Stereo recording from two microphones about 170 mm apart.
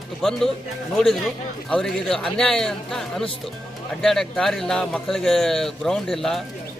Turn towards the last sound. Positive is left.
turn(degrees=0)  # may be behind; listen again after turning